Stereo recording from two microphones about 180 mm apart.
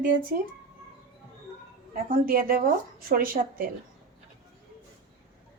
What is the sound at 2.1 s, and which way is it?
A woman's voice, 50° right (ahead or behind).